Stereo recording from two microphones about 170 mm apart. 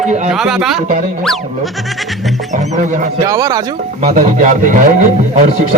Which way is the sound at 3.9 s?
45° right (ahead or behind).